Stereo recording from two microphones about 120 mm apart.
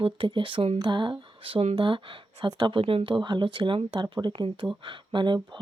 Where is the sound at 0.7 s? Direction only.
40° right (ahead or behind).